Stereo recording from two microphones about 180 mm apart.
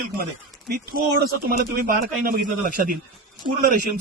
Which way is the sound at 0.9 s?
55° right (ahead or behind).